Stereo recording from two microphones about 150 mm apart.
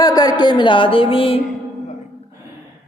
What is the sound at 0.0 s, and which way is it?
Speech, 25° left (ahead or behind).